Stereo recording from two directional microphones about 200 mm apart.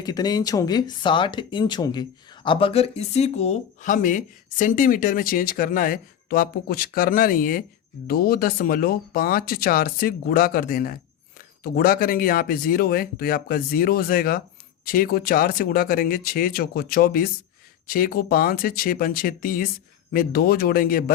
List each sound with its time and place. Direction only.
0.0 s speech: 20° left (ahead or behind); by 21.0 s 45° left (ahead or behind)